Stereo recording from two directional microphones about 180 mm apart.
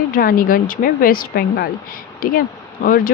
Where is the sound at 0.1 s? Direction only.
55° left (ahead or behind).